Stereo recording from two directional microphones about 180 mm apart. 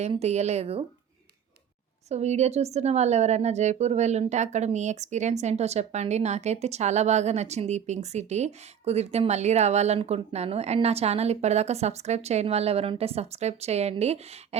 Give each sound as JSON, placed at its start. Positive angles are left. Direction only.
{"t": 0.0, "sound": "a woman's voice", "side_deg": -35}
{"t": 2.0, "sound": "a woman's voice", "side_deg": -40}